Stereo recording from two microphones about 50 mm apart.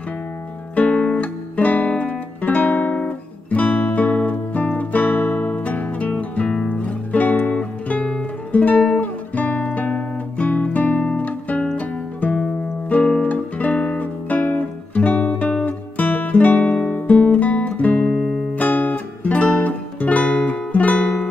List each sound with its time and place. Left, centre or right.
0.7 s music: left
6.1 s music: centre
6.7 s music: left
16.6 s guitar: left
18.6 s music: left